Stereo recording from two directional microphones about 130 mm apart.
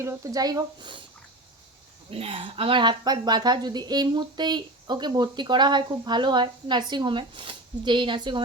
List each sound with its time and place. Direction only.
0.0 s speech: 25° right (ahead or behind)
2.0 s speech: 50° right (ahead or behind)